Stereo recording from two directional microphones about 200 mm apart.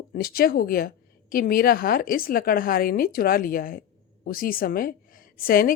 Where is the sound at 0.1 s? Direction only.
50° left (ahead or behind).